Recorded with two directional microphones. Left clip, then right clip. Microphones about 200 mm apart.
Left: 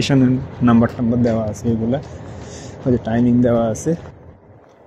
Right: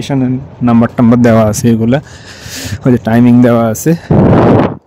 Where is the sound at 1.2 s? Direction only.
55° right (ahead or behind).